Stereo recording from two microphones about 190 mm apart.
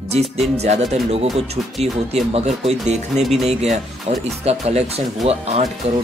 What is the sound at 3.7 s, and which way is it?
Speech, 35° right (ahead or behind).